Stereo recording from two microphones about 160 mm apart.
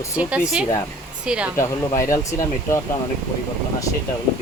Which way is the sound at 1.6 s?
20° left (ahead or behind).